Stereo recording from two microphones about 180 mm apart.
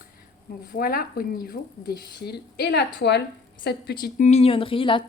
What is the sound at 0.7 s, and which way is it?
A woman's voice, 55° left (ahead or behind).